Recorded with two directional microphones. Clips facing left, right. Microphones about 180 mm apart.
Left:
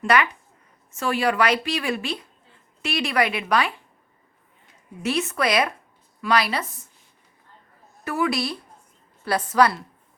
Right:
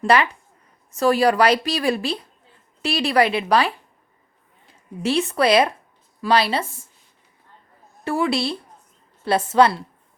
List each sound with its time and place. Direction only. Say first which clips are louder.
0.0 s a woman's voice: right 3 dB; 30° right (ahead or behind)
8.0 s speech: right 3 dB; 30° right (ahead or behind)